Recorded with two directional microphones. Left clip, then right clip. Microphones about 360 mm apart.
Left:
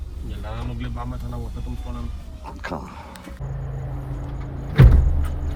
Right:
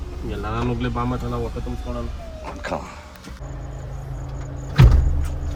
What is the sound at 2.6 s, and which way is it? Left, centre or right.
Speech, centre.